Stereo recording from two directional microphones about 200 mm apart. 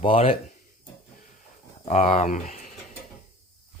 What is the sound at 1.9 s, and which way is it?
Speech, 35° left (ahead or behind).